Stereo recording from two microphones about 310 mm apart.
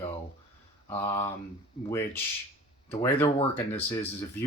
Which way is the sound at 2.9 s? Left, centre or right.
Centre.